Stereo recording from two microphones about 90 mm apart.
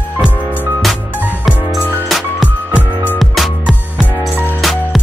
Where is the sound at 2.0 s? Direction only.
Centre (ahead or behind).